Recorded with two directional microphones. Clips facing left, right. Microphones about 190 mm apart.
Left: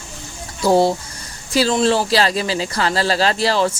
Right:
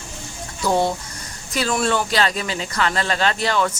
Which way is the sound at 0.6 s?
35° left (ahead or behind).